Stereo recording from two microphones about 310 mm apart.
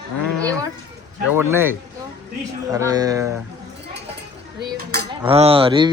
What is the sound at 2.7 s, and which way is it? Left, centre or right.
Speech, centre.